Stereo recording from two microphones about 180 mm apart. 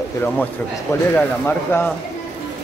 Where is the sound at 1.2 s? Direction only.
10° left (ahead or behind).